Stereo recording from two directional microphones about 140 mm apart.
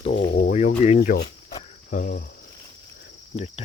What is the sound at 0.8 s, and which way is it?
Speech, 50° left (ahead or behind).